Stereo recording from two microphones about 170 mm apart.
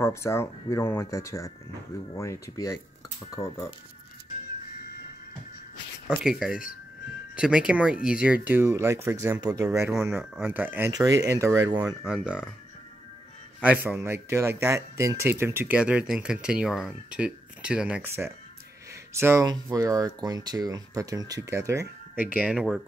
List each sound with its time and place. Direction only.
0.0 s speech: 15° left (ahead or behind)
6.0 s speech: 5° right (ahead or behind); by 11.9 s 20° right (ahead or behind)
12.0 s speech: 5° right (ahead or behind)
13.6 s speech: 10° right (ahead or behind)